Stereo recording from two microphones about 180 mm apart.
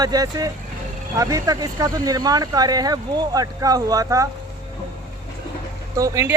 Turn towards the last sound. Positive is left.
turn(degrees=-20)  # may be behind; listen again after turning